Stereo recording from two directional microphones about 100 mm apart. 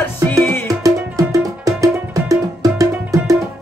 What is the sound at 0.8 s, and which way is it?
Music, 35° right (ahead or behind).